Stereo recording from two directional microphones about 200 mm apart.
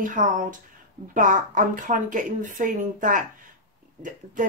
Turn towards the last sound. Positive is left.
turn(degrees=-40)  # may be behind; listen again after turning